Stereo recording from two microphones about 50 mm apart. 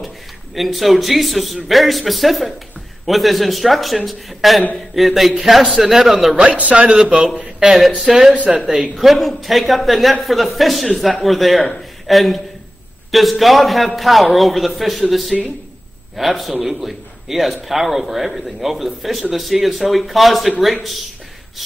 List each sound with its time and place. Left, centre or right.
0.6 s a man's voice: centre
6.3 s a man's voice: right
8.0 s a man's voice: centre